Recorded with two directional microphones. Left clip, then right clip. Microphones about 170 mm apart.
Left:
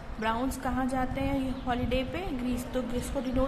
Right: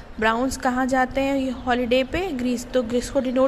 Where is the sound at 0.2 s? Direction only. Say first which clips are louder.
Right 9 dB; 45° right (ahead or behind).